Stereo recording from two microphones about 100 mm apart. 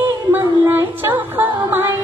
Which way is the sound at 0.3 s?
20° right (ahead or behind).